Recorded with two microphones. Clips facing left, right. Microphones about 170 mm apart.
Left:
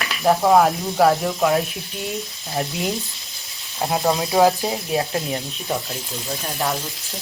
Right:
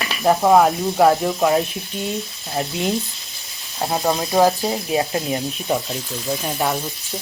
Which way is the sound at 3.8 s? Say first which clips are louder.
Even; centre (ahead or behind).